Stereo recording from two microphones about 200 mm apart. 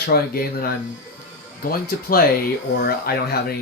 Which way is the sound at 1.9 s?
50° left (ahead or behind).